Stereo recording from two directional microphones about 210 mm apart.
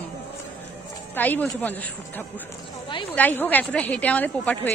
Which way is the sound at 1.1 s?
10° left (ahead or behind).